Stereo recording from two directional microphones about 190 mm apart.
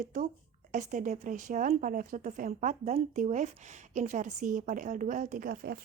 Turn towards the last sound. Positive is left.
turn(degrees=-50)  # may be behind; listen again after turning